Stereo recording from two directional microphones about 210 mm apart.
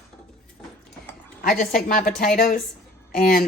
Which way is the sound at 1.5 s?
40° left (ahead or behind).